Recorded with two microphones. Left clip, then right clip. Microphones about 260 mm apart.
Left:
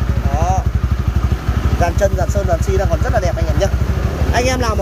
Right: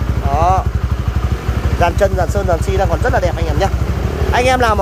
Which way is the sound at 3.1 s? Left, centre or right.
Centre.